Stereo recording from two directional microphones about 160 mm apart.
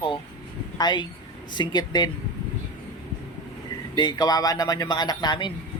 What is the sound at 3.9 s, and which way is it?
Speech, 25° left (ahead or behind).